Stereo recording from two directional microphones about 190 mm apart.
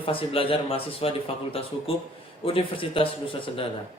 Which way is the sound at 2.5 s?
30° left (ahead or behind).